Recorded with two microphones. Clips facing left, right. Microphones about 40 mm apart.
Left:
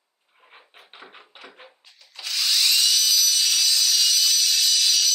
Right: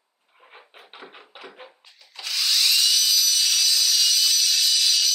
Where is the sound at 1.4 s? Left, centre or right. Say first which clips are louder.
Right 5 dB; centre.